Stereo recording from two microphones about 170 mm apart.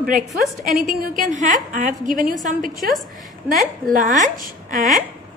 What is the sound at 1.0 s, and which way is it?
A woman's voice, 50° right (ahead or behind).